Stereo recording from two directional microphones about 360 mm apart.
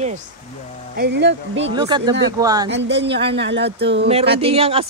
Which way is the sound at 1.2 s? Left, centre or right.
Right.